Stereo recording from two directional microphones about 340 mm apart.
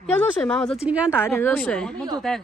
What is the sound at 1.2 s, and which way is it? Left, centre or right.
Speech, centre.